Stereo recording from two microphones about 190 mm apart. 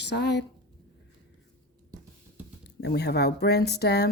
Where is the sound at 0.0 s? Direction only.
65° left (ahead or behind).